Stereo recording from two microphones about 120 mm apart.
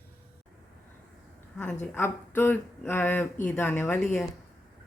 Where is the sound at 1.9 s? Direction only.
20° left (ahead or behind).